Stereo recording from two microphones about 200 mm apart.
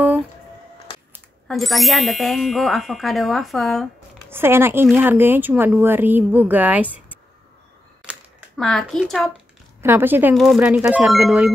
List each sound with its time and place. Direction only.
1.5 s ding: centre (ahead or behind)
4.3 s speech: 10° right (ahead or behind)
8.1 s crumpling: centre (ahead or behind)
9.8 s speech: 10° right (ahead or behind)
10.3 s ding: centre (ahead or behind)